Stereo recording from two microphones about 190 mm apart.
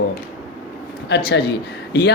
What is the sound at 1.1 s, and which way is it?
Speech, 65° left (ahead or behind).